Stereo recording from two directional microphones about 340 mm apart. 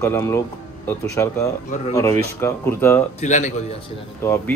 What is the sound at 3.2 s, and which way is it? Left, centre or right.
Speech, left.